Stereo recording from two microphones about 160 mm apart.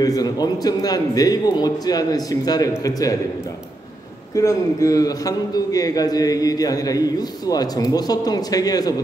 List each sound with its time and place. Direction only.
0.0 s a man's voice: 25° left (ahead or behind)
4.4 s a man's voice: 20° left (ahead or behind)